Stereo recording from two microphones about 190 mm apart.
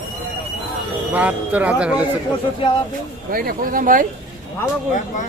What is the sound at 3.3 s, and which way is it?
Speech, 50° right (ahead or behind).